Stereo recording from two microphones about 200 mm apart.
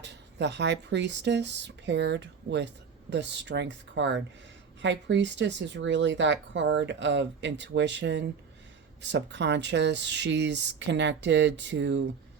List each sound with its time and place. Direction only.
0.0 s speech: 60° right (ahead or behind)